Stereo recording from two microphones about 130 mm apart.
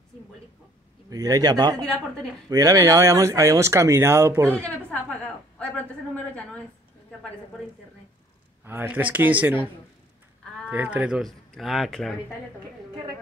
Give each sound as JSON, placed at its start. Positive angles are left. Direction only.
{"t": 1.1, "sound": "speech", "side_deg": -25}
{"t": 4.5, "sound": "a woman's voice", "side_deg": 10}
{"t": 8.6, "sound": "speech", "side_deg": -15}
{"t": 10.7, "sound": "speech", "side_deg": -10}